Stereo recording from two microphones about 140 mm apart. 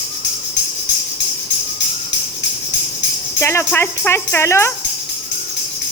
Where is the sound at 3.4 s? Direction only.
15° left (ahead or behind).